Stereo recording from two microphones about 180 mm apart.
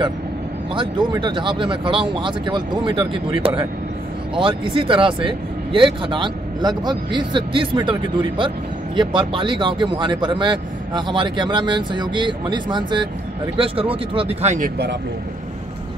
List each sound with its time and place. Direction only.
0.7 s speech: 25° right (ahead or behind)